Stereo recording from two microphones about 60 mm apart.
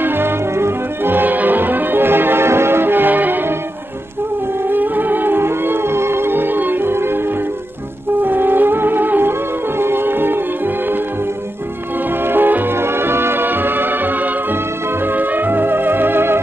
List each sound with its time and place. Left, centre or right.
0.0 s music: right
4.6 s music: right
8.2 s music: right
12.3 s music: right